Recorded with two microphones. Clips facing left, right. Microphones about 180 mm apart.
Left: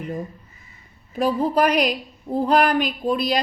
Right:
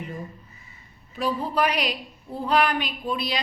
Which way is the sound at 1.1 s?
45° left (ahead or behind).